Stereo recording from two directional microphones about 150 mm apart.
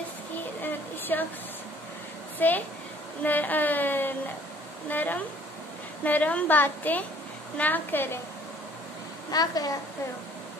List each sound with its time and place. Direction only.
0.6 s a sound: 15° left (ahead or behind)
2.3 s a woman's voice: 10° left (ahead or behind)
9.3 s a woman's voice: 25° left (ahead or behind)